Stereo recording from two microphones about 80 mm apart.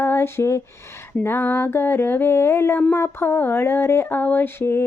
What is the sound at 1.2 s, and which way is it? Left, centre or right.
Mantra, left.